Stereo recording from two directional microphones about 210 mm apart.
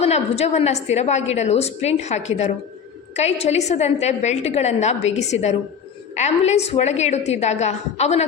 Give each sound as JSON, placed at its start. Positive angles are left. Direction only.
{"t": 0.0, "sound": "a woman's voice", "side_deg": 30}